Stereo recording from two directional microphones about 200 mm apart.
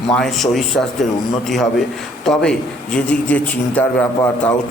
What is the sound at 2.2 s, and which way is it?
A man's voice, 5° left (ahead or behind).